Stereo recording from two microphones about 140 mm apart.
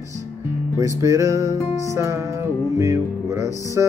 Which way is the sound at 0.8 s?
25° right (ahead or behind).